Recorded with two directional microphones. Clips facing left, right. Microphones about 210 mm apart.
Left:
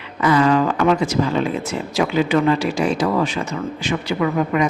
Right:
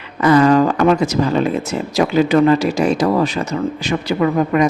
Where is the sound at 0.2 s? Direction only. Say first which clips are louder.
Right 4 dB; 40° right (ahead or behind).